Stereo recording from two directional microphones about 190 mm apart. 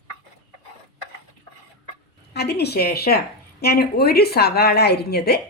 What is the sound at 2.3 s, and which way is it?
A woman's voice, 60° left (ahead or behind).